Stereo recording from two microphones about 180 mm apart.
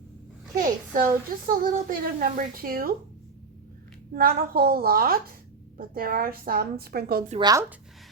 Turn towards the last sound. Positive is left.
turn(degrees=-20)  # may be behind; listen again after turning